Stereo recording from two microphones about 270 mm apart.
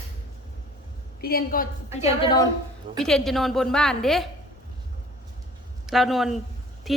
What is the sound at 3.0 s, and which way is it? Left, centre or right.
A woman's voice, centre.